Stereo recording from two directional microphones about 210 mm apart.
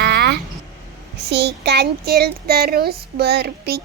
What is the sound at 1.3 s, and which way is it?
Child singing, 55° right (ahead or behind).